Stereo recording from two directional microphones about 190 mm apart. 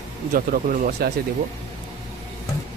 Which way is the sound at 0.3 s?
45° right (ahead or behind).